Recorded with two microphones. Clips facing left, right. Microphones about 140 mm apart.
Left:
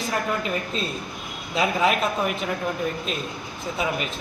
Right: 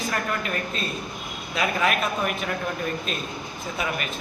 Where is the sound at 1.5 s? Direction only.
25° left (ahead or behind).